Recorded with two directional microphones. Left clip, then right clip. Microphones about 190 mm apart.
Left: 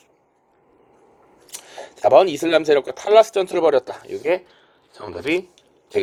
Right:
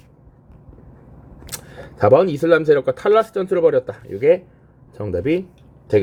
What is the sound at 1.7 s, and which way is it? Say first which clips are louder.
Speech: even; 30° left (ahead or behind).